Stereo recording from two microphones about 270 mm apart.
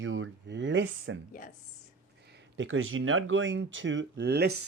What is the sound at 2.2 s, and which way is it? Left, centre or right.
Speech, right.